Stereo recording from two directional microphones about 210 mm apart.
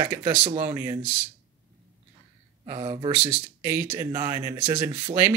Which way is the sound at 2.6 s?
20° right (ahead or behind).